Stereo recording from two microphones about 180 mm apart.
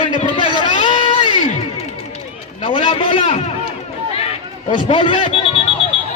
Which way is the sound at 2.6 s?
30° left (ahead or behind).